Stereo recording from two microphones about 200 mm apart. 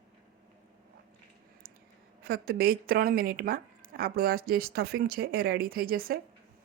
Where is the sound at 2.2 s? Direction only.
50° right (ahead or behind).